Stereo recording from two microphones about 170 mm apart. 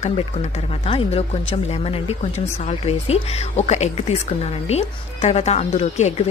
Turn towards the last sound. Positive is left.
turn(degrees=40)  # may be behind; listen again after turning